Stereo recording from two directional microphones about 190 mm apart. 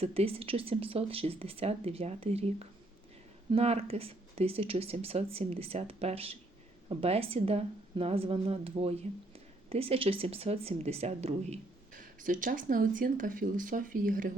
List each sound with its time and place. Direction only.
0.0 s a woman's voice: 30° right (ahead or behind)